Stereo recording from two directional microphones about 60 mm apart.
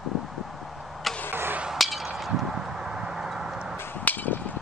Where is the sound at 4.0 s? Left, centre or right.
Left.